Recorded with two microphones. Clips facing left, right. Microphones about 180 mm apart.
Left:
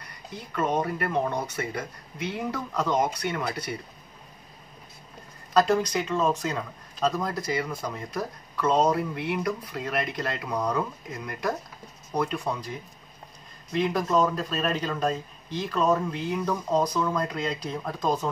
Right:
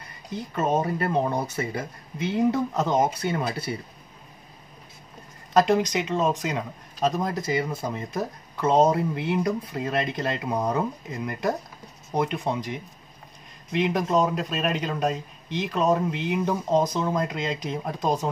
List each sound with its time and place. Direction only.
0.6 s speech: 25° right (ahead or behind)
5.5 s speech: 20° right (ahead or behind)
13.7 s speech: 15° right (ahead or behind)